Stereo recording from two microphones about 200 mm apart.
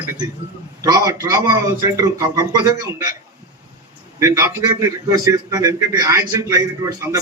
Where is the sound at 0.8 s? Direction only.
20° right (ahead or behind).